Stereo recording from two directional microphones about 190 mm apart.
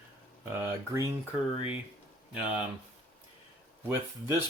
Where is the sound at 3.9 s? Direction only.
15° right (ahead or behind).